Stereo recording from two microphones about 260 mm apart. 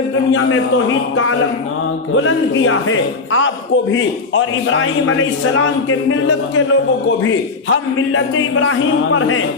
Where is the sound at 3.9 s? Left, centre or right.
Left.